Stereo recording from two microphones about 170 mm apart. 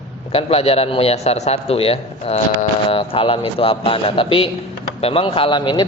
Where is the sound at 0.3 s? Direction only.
35° left (ahead or behind).